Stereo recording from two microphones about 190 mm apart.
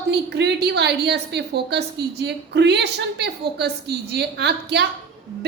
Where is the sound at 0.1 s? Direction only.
60° right (ahead or behind).